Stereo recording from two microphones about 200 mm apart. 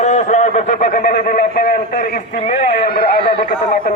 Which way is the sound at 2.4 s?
35° left (ahead or behind).